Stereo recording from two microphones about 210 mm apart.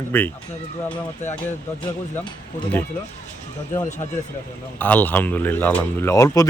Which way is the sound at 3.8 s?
35° left (ahead or behind).